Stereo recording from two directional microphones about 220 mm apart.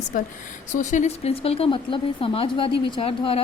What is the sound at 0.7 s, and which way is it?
Speech, 35° left (ahead or behind).